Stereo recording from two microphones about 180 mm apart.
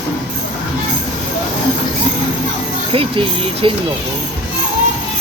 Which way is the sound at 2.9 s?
30° right (ahead or behind).